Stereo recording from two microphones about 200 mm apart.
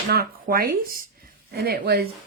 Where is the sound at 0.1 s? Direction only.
50° right (ahead or behind).